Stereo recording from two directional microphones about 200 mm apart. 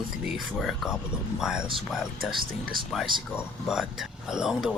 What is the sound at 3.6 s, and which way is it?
Speech, centre (ahead or behind).